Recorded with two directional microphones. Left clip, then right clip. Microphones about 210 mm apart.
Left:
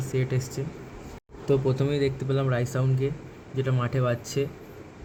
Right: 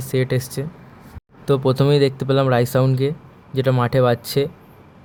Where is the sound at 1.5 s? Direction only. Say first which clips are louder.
Right 8 dB; 50° right (ahead or behind).